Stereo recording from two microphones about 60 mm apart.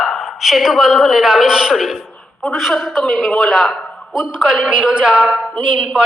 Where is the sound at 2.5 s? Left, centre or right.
Centre.